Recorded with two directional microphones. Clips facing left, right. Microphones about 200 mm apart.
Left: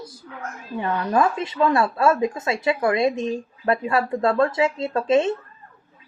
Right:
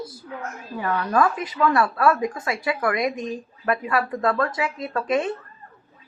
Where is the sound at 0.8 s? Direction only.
20° left (ahead or behind).